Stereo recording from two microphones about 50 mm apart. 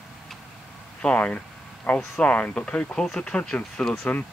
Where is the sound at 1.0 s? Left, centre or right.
Left.